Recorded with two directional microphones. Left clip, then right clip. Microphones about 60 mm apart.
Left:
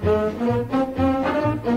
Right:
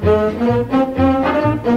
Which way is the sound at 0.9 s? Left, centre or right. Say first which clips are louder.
Right 6 dB; left.